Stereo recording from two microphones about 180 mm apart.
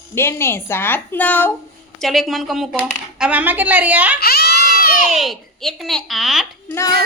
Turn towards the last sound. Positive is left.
turn(degrees=0)  # may be behind; listen again after turning